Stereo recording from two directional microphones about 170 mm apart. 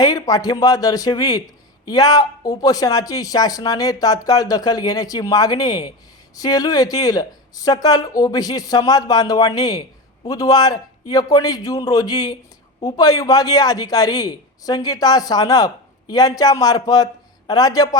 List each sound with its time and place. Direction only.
0.0 s a man's voice: 20° left (ahead or behind)